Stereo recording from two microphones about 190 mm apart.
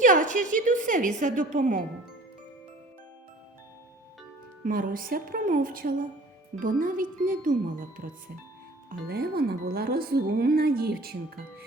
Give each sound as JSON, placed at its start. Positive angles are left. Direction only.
{"t": 0.0, "sound": "speech", "side_deg": -45}
{"t": 4.6, "sound": "speech", "side_deg": -45}